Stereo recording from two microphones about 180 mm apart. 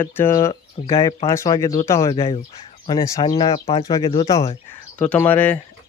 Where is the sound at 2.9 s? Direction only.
20° left (ahead or behind).